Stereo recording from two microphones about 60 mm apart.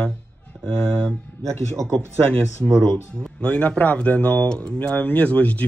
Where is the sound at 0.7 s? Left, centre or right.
Centre.